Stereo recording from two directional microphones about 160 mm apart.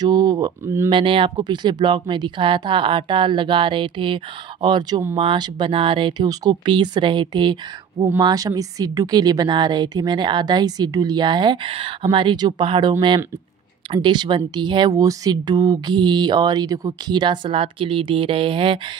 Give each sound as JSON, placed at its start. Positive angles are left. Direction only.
{"t": 0.0, "sound": "speech", "side_deg": -25}
{"t": 13.9, "sound": "speech", "side_deg": -25}